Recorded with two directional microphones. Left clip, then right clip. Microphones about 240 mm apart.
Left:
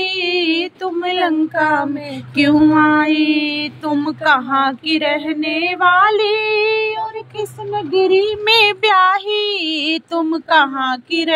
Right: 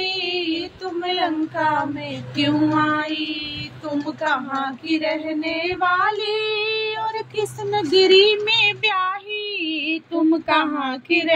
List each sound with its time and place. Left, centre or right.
0.0 s a sound: left
2.3 s mantra: left
8.5 s female singing: left